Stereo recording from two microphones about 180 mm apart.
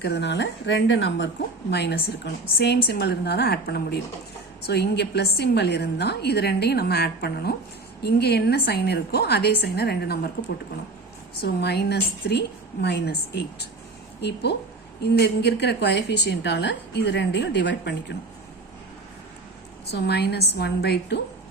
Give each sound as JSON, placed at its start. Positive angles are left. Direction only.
{"t": 0.0, "sound": "a woman's voice", "side_deg": 70}
{"t": 1.7, "sound": "a woman's voice", "side_deg": 70}
{"t": 11.4, "sound": "a woman's voice", "side_deg": 65}
{"t": 19.9, "sound": "a woman's voice", "side_deg": 65}